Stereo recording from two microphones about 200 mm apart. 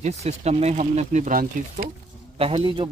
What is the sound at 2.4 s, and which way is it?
Speech, 25° right (ahead or behind).